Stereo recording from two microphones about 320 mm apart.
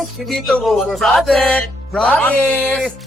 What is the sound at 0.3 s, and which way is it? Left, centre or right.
Speech, centre.